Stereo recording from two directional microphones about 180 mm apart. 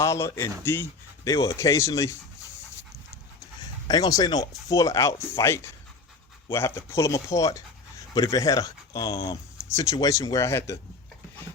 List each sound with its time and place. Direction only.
0.0 s speech: 15° left (ahead or behind)
3.8 s speech: 20° left (ahead or behind)